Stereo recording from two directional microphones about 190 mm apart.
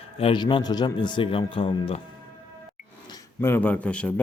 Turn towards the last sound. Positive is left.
turn(degrees=5)  # may be behind; listen again after turning